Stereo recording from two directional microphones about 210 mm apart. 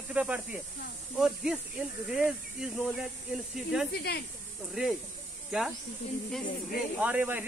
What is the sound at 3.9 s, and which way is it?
Speech, 50° left (ahead or behind).